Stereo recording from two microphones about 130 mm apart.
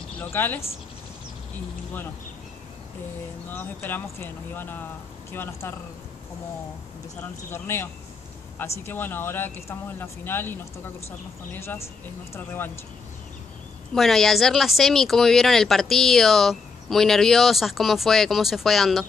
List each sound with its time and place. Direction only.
0.2 s speech: 15° left (ahead or behind)
3.4 s speech: 15° left (ahead or behind)
7.5 s speech: 20° left (ahead or behind)
13.9 s speech: centre (ahead or behind)